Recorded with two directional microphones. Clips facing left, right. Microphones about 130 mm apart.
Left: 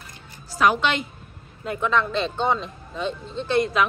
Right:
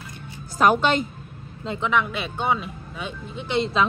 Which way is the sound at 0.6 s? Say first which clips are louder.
Right 2 dB; 45° right (ahead or behind).